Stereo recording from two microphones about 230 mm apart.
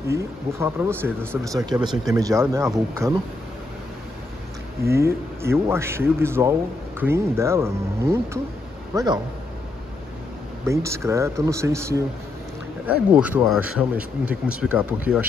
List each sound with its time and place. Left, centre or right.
0.1 s speech: centre
4.8 s speech: centre
10.6 s speech: centre
13.1 s speech: centre